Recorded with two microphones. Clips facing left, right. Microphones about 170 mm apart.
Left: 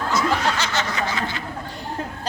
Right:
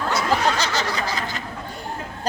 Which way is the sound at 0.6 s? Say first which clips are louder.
Even; 35° right (ahead or behind).